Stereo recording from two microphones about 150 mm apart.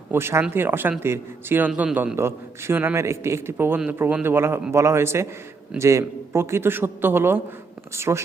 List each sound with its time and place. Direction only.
0.1 s a man's voice: 15° right (ahead or behind)